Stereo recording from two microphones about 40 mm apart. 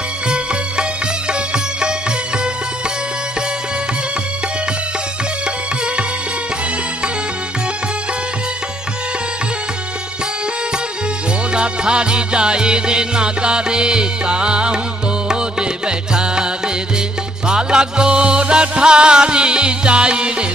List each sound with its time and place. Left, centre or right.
1.5 s music: right
11.5 s music: right